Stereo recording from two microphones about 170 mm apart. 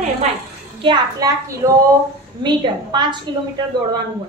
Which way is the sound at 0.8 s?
25° right (ahead or behind).